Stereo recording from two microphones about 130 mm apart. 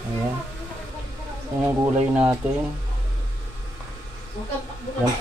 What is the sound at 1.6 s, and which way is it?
Speech, 15° right (ahead or behind).